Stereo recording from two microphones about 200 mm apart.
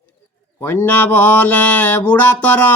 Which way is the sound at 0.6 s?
10° left (ahead or behind).